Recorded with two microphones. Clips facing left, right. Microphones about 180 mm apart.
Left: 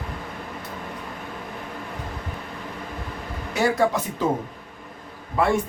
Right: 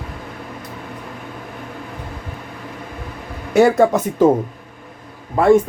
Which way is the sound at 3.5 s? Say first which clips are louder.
Right 9 dB; 50° right (ahead or behind).